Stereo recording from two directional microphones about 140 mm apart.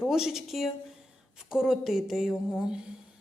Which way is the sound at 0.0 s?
5° right (ahead or behind).